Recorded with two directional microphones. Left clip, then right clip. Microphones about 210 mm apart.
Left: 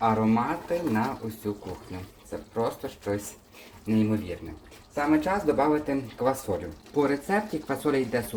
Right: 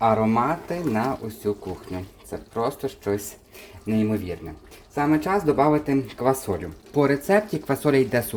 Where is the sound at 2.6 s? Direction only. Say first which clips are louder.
Right 4 dB; 50° right (ahead or behind).